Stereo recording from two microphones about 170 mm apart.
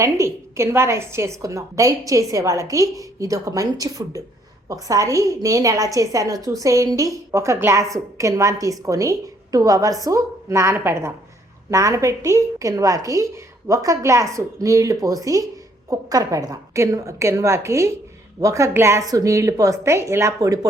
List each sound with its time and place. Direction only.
0.0 s a woman's voice: 15° right (ahead or behind)